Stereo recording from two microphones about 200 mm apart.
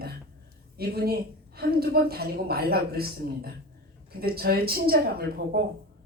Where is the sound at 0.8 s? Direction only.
50° right (ahead or behind).